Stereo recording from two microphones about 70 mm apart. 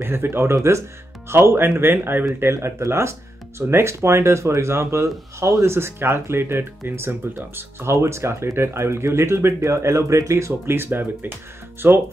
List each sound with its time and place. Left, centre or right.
0.0 s speech: right
2.4 s speech: right